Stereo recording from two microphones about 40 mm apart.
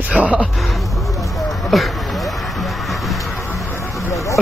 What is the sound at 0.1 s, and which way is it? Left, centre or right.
Speech, right.